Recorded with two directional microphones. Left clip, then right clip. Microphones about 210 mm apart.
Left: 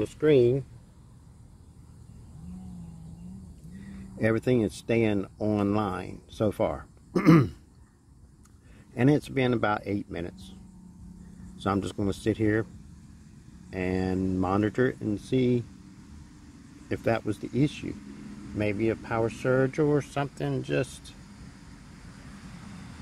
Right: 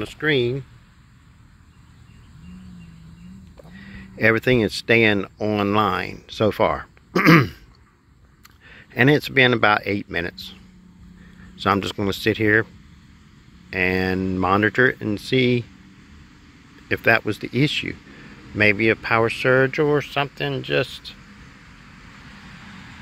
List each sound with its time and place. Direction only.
0.2 s speech: centre (ahead or behind)
4.2 s speech: 5° right (ahead or behind)
5.4 s speech: centre (ahead or behind)
7.1 s throat clearing: centre (ahead or behind)
8.9 s speech: 5° right (ahead or behind)
13.7 s speech: 5° right (ahead or behind)
16.9 s speech: 5° right (ahead or behind)
19.7 s speech: centre (ahead or behind)